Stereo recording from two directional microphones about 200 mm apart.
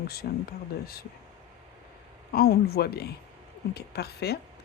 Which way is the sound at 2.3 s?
50° left (ahead or behind).